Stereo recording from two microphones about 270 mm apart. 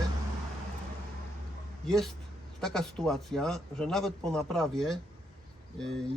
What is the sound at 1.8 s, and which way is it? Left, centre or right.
A man's voice, centre.